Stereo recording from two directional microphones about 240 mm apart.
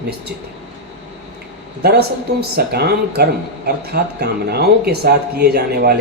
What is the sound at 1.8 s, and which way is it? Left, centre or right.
Speech, right.